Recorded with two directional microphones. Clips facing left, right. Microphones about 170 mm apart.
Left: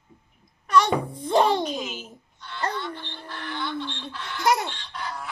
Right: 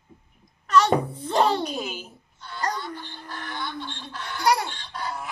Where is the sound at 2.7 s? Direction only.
40° right (ahead or behind).